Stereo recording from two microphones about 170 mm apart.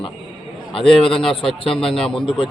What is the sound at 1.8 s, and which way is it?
Speech, 5° left (ahead or behind).